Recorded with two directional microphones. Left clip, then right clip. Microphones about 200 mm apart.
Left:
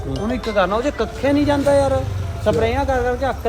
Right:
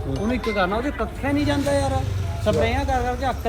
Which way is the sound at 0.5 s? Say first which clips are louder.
Left 6 dB; 25° left (ahead or behind).